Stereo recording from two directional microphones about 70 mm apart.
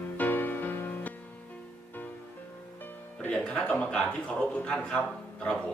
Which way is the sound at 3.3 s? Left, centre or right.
Centre.